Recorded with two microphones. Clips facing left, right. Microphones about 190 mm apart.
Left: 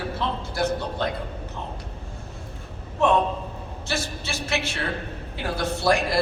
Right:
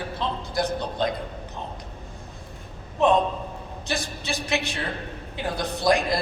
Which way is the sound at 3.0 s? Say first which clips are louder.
Right 1 dB; 15° right (ahead or behind).